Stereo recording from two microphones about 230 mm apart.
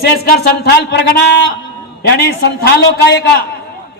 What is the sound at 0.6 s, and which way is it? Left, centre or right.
A man's voice, left.